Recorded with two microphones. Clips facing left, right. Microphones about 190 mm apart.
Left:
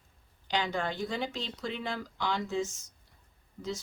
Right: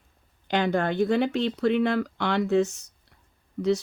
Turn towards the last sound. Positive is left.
turn(degrees=-75)  # may be behind; listen again after turning